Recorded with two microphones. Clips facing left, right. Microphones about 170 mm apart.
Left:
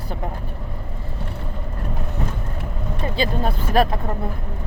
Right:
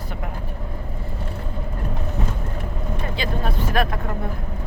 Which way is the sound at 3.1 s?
30° left (ahead or behind).